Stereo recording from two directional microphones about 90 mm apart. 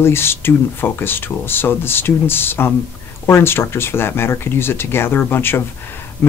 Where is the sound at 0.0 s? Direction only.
25° left (ahead or behind).